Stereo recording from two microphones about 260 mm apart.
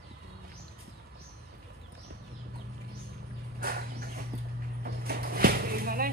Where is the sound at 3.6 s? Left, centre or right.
Right.